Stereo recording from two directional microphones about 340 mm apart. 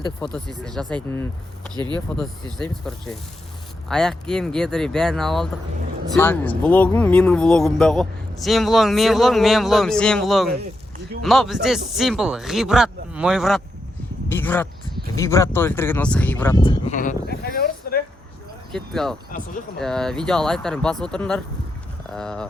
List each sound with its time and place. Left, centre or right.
0.3 s speech: centre
1.7 s speech: centre
2.1 s speech: centre
10.5 s a sound: right
11.2 s speech: centre; by 18.0 s left
18.7 s speech: centre